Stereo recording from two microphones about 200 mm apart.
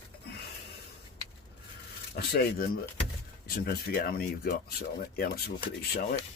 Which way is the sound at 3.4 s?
50° left (ahead or behind).